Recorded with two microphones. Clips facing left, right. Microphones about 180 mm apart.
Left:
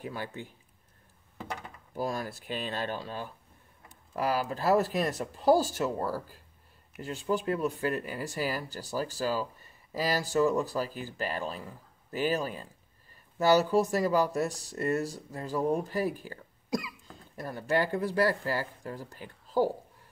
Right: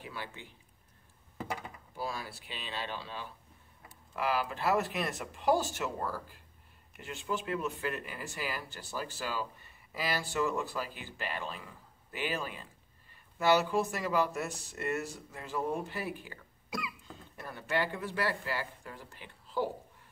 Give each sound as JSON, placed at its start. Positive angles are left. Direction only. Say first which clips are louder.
{"t": 0.0, "sound": "speech", "louder": "left 6 dB", "side_deg": 45}
{"t": 1.4, "sound": "speech", "louder": "right 1 dB", "side_deg": -5}
{"t": 2.0, "sound": "speech", "louder": "left 6 dB", "side_deg": 45}